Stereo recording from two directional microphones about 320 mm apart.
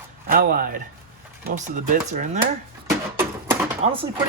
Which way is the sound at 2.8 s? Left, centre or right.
Centre.